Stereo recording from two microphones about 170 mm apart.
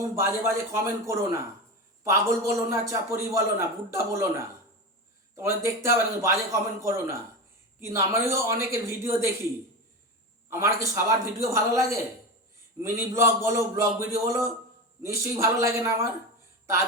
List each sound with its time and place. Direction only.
0.2 s a man's voice: 15° right (ahead or behind)
10.5 s a man's voice: 15° right (ahead or behind)